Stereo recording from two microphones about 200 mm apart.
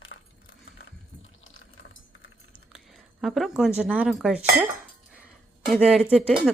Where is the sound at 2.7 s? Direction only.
Centre (ahead or behind).